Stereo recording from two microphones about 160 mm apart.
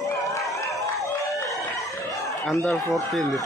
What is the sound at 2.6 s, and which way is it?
Speech, centre (ahead or behind).